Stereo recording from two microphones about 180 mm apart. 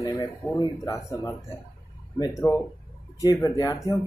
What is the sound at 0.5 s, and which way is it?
Speech, 15° left (ahead or behind).